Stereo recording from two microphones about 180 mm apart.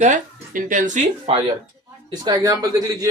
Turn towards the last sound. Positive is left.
turn(degrees=-20)  # may be behind; listen again after turning